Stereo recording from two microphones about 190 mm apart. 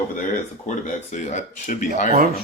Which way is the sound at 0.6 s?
40° left (ahead or behind).